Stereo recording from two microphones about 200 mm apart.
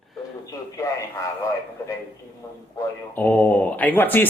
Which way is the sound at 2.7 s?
10° left (ahead or behind).